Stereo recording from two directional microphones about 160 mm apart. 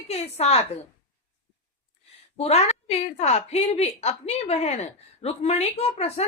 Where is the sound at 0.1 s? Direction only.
40° left (ahead or behind).